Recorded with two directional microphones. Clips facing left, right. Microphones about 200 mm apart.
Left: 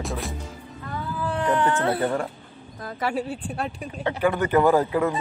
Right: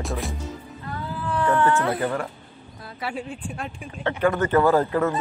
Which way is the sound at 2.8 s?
40° left (ahead or behind).